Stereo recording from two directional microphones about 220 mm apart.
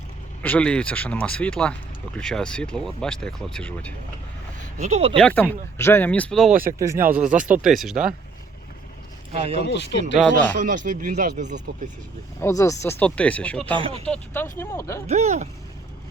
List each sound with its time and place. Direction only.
0.4 s speech: 5° left (ahead or behind)
4.8 s speech: 30° right (ahead or behind)
5.1 s speech: 5° left (ahead or behind)
6.7 s speech: 10° right (ahead or behind)
9.3 s speech: 25° right (ahead or behind)
9.6 s speech: 50° left (ahead or behind)
10.2 s speech: 5° left (ahead or behind)
10.6 s speech: 35° right (ahead or behind)
12.4 s speech: 15° left (ahead or behind)
15.0 s speech: 30° right (ahead or behind)